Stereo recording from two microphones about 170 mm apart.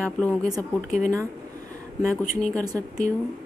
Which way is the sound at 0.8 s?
45° left (ahead or behind).